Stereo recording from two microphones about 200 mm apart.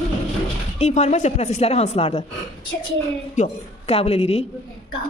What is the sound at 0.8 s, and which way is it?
Speech, 35° left (ahead or behind).